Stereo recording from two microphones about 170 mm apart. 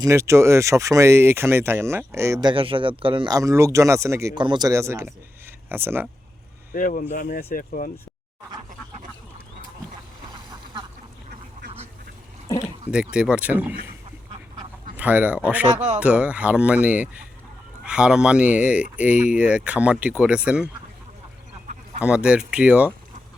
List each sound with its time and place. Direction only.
0.0 s speech: 15° right (ahead or behind)
6.7 s speech: 50° left (ahead or behind)
10.3 s duck: 25° right (ahead or behind)
12.5 s oink: 15° left (ahead or behind)
12.9 s speech: 5° right (ahead or behind)
14.9 s speech: 10° right (ahead or behind)
22.0 s speech: 5° right (ahead or behind)